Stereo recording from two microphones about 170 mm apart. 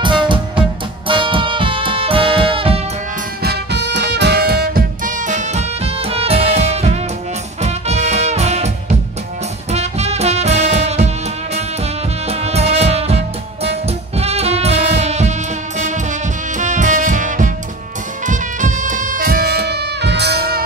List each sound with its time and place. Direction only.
0.0 s music: 30° right (ahead or behind)
3.4 s music: 85° right; by 11.1 s 40° right (ahead or behind)
12.3 s music: 40° right (ahead or behind)
16.5 s music: 45° right (ahead or behind); by 20.6 s 70° right (ahead or behind)